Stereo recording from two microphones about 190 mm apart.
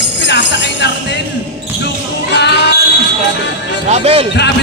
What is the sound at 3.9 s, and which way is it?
Speech, 30° right (ahead or behind).